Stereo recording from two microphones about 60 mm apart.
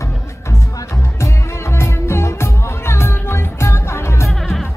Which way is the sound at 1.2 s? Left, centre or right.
Left.